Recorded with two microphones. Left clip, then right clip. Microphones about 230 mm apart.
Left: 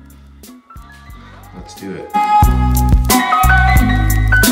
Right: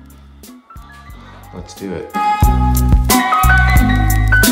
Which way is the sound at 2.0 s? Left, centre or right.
Centre.